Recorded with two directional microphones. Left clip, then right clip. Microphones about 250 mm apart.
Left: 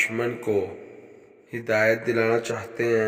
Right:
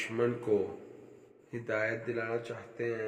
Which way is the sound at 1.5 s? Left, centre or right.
Left.